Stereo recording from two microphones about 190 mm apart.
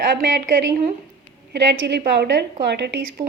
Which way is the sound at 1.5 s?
60° right (ahead or behind).